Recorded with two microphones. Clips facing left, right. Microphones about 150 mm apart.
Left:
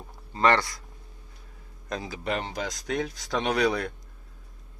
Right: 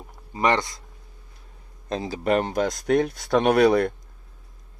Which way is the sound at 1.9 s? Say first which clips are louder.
Right 6 dB; 30° right (ahead or behind).